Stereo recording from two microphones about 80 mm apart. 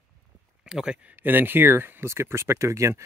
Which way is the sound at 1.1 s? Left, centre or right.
Right.